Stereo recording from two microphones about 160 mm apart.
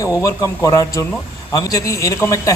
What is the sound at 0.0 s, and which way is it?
Speech, 20° left (ahead or behind).